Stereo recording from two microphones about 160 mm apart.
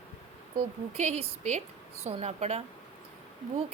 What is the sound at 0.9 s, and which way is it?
Speech, 40° right (ahead or behind).